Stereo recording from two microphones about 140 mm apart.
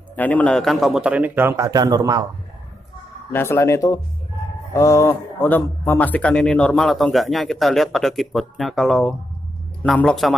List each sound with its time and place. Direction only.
0.1 s a man's voice: 10° left (ahead or behind); by 2.2 s 25° right (ahead or behind)
3.3 s a man's voice: 15° left (ahead or behind)